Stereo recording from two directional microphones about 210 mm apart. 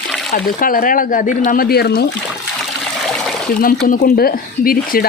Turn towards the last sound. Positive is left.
turn(degrees=45)  # may be behind; listen again after turning